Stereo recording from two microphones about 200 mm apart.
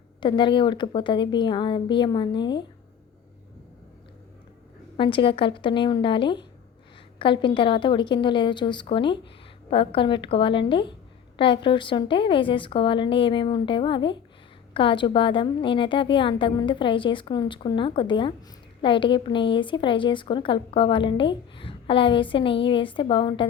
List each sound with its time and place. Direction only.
0.2 s a woman's voice: 25° left (ahead or behind)
4.9 s a woman's voice: 25° left (ahead or behind)